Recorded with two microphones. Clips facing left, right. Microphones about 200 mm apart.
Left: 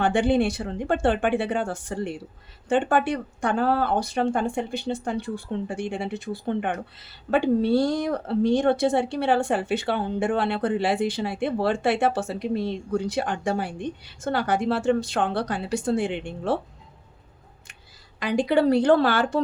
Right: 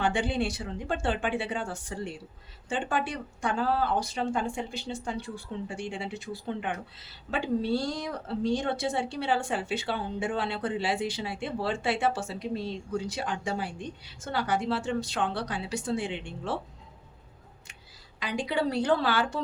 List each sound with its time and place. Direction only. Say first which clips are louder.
0.0 s speech: left 7 dB; 50° left (ahead or behind)
18.2 s a woman's voice: left 8 dB; 50° left (ahead or behind)